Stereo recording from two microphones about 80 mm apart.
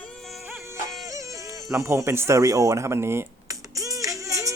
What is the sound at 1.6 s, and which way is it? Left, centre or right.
Speech, right.